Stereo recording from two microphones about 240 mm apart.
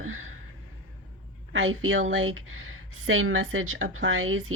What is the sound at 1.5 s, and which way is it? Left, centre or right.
A woman's voice, right.